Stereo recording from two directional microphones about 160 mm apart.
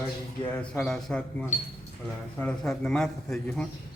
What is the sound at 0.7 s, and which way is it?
Speech, 5° left (ahead or behind).